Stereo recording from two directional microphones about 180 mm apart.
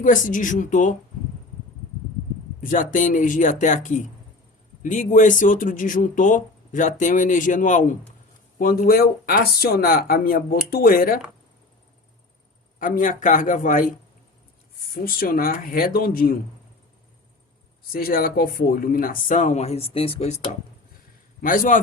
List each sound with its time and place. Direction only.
0.0 s speech: 45° left (ahead or behind)
2.6 s speech: 45° left (ahead or behind)
12.8 s speech: 50° left (ahead or behind)
15.0 s speech: 55° left (ahead or behind)
17.9 s speech: 55° left (ahead or behind); by 20.6 s 40° left (ahead or behind)
21.4 s speech: 50° left (ahead or behind)